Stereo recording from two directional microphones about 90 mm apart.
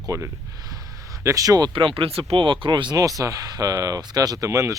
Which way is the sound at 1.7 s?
70° right (ahead or behind).